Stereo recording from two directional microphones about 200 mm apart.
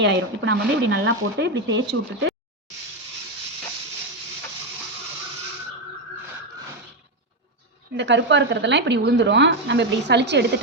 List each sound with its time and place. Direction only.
0.0 s speech: 60° right (ahead or behind)
7.9 s speech: 60° right (ahead or behind)